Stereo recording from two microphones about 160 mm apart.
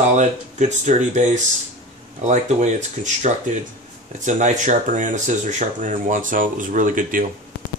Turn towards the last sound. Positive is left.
turn(degrees=-55)  # may be behind; listen again after turning